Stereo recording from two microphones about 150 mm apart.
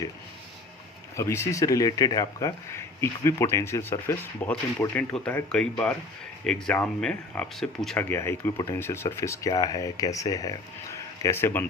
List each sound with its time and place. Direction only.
1.1 s speech: 20° left (ahead or behind)
8.1 s speech: 15° left (ahead or behind)